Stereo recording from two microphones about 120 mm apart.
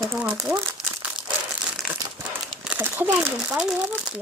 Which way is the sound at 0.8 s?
5° right (ahead or behind).